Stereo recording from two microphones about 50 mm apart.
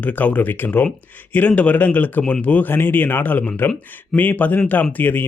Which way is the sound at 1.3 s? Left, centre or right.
Left.